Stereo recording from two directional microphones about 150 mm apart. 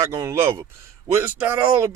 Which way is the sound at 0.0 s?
20° right (ahead or behind).